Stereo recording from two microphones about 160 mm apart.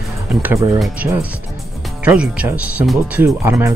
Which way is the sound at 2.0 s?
5° right (ahead or behind).